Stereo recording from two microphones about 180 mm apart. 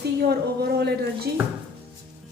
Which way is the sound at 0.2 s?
65° right (ahead or behind).